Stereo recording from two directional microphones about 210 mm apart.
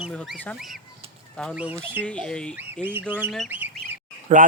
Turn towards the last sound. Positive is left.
turn(degrees=-35)  # may be behind; listen again after turning